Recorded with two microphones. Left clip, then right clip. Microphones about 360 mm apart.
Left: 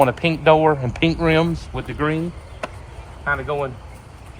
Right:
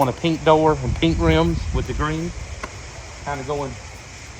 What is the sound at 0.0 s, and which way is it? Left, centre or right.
Speech, left.